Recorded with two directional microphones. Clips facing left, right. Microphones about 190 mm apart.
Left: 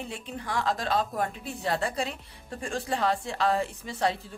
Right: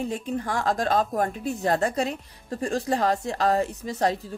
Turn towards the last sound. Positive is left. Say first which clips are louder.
# right 4 dB
turn(degrees=-40)  # may be behind; listen again after turning